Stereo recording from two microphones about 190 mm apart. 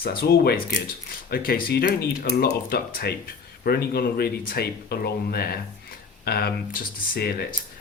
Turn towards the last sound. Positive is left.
turn(degrees=55)  # may be behind; listen again after turning